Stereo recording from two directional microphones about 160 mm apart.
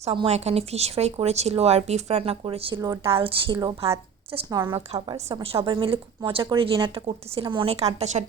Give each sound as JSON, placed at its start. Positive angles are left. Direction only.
{"t": 0.0, "sound": "speech", "side_deg": -40}